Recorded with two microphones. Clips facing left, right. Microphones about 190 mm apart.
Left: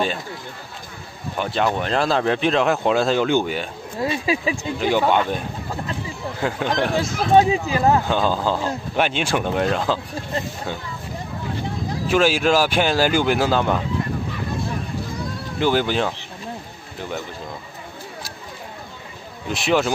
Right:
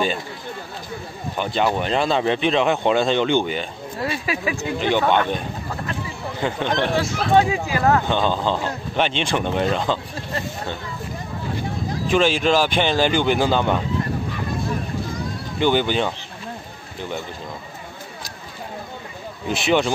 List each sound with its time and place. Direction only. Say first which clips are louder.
1.4 s speech: even; centre (ahead or behind)
4.0 s a sound: left 3 dB; 20° left (ahead or behind)
4.6 s speech: even; 5° left (ahead or behind)
6.4 s speech: even; 5° left (ahead or behind)
7.3 s speech: left 2 dB; 20° left (ahead or behind)
8.1 s speech: even; 5° left (ahead or behind)
12.1 s speech: even; 5° left (ahead or behind)
15.6 s speech: even; centre (ahead or behind)
19.5 s speech: even; centre (ahead or behind)